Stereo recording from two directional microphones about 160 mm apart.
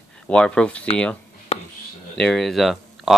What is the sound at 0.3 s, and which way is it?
Speech, 5° left (ahead or behind).